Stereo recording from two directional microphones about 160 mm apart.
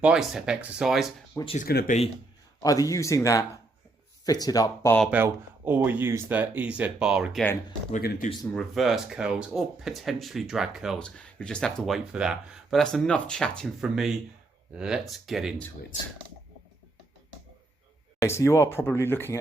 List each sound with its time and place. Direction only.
0.0 s speech: 5° right (ahead or behind)
1.5 s speech: 60° left (ahead or behind)
2.6 s a man's voice: 20° left (ahead or behind)
5.1 s speech: 10° right (ahead or behind)
7.9 s speech: 55° left (ahead or behind)
8.5 s speech: centre (ahead or behind)
15.9 s speech: 50° left (ahead or behind)
18.2 s speech: 15° left (ahead or behind)